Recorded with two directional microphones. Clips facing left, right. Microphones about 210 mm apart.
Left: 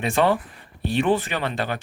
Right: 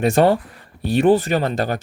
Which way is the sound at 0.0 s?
40° right (ahead or behind).